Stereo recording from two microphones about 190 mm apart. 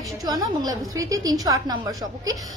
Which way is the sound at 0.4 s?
20° right (ahead or behind).